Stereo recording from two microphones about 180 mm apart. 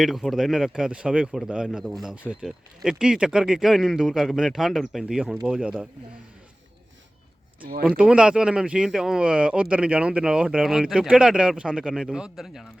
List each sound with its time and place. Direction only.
0.0 s speech: centre (ahead or behind)
7.9 s speech: 5° right (ahead or behind)